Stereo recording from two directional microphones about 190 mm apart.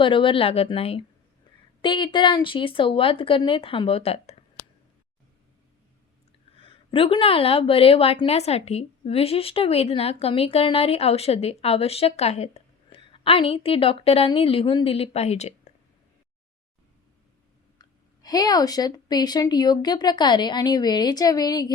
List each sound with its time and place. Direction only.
0.0 s speech: 25° left (ahead or behind)
6.6 s a woman's voice: 30° left (ahead or behind)
17.7 s speech: 20° left (ahead or behind)